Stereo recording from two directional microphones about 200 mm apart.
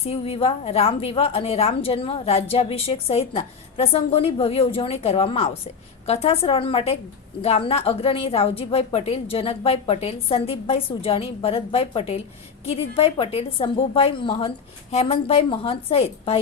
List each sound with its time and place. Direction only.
0.1 s a woman's voice: 30° left (ahead or behind)